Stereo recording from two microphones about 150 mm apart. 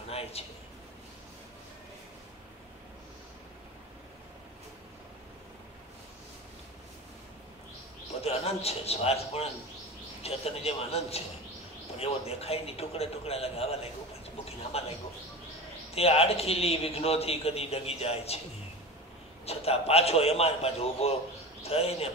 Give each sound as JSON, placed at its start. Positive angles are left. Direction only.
{"t": 0.1, "sound": "a man's voice", "side_deg": 40}
{"t": 8.2, "sound": "a man's voice", "side_deg": 45}
{"t": 19.4, "sound": "a man's voice", "side_deg": 40}